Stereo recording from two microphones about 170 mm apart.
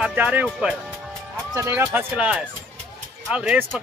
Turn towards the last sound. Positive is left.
turn(degrees=-5)  # may be behind; listen again after turning